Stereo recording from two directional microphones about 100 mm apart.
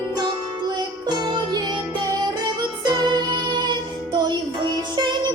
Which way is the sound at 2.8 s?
45° right (ahead or behind).